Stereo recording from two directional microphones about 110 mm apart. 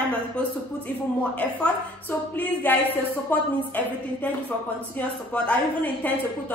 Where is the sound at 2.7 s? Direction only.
15° left (ahead or behind).